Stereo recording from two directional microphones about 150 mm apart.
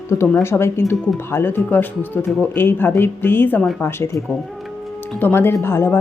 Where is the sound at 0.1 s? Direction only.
20° left (ahead or behind).